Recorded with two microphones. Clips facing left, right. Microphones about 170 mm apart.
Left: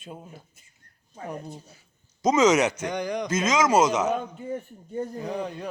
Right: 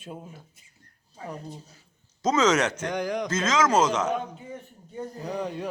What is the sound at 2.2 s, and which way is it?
Speech, 10° left (ahead or behind).